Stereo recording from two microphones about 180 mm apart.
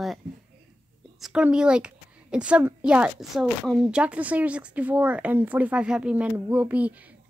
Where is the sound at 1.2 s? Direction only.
5° right (ahead or behind).